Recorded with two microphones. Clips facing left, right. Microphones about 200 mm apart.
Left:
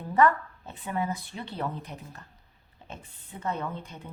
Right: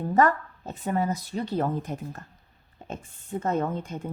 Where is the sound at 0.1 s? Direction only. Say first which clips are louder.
Even; 40° right (ahead or behind).